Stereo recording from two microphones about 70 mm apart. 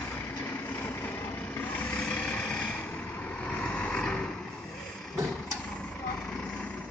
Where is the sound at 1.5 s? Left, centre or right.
Centre.